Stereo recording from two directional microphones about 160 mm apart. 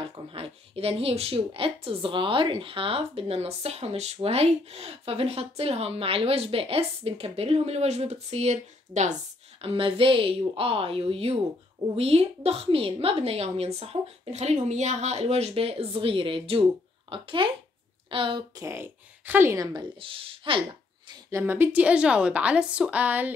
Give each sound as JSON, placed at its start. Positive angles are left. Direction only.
{"t": 0.1, "sound": "speech", "side_deg": -35}
{"t": 18.6, "sound": "speech", "side_deg": -15}
{"t": 21.1, "sound": "a woman's voice", "side_deg": -20}